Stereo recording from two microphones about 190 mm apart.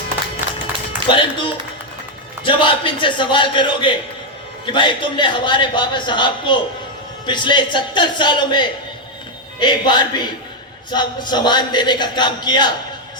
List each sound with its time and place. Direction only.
1.1 s a man's voice: 25° left (ahead or behind)